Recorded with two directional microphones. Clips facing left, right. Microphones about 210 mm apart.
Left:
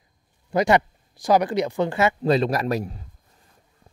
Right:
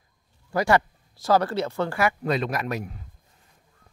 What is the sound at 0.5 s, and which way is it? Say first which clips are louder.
Speech: left 3 dB; 20° left (ahead or behind).